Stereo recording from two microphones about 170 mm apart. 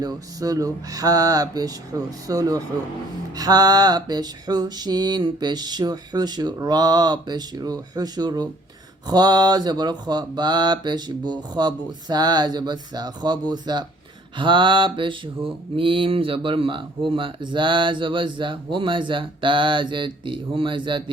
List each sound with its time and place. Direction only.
0.0 s speech: 20° right (ahead or behind)